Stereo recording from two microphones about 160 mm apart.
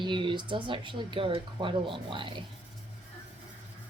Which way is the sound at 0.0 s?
30° right (ahead or behind).